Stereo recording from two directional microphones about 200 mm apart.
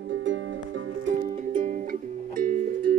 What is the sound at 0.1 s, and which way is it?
Music, 70° right (ahead or behind).